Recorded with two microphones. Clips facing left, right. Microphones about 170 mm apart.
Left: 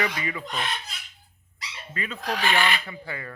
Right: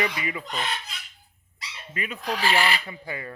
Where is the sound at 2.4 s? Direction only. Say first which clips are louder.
Right 1 dB; 35° right (ahead or behind).